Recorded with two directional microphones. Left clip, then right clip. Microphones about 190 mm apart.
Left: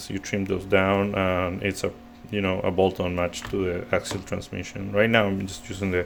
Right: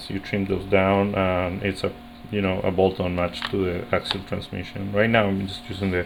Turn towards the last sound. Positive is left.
turn(degrees=20)  # may be behind; listen again after turning